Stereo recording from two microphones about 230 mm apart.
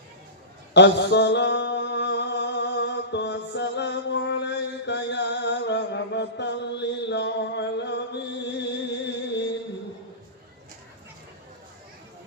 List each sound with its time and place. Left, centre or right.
0.7 s mantra: left